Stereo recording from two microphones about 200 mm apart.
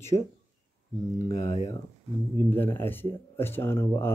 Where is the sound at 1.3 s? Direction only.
15° left (ahead or behind).